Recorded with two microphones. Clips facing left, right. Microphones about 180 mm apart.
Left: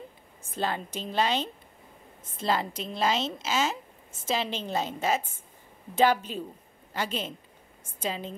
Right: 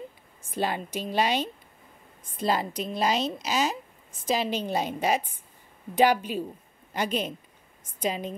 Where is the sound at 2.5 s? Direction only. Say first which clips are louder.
Right 1 dB; 15° right (ahead or behind).